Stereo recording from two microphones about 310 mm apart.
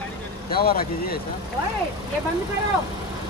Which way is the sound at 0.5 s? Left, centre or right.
Left.